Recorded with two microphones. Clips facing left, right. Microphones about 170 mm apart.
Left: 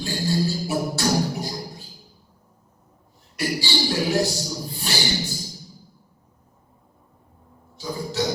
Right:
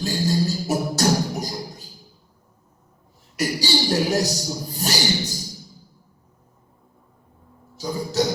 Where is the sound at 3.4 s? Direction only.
40° right (ahead or behind).